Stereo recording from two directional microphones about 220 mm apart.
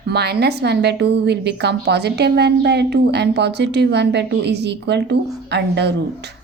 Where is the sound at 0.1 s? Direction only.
50° right (ahead or behind).